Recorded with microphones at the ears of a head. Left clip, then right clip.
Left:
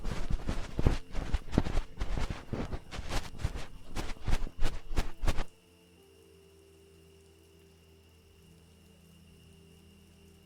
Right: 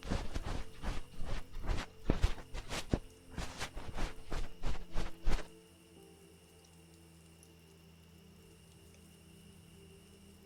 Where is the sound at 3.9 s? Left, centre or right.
Left.